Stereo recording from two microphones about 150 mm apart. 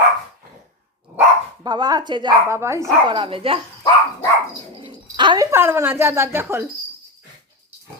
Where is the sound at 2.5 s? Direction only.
20° right (ahead or behind).